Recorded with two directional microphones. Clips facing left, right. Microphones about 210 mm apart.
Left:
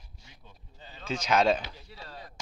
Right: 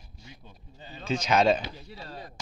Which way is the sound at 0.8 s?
15° right (ahead or behind).